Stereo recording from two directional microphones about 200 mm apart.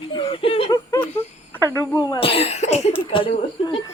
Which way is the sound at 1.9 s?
20° left (ahead or behind).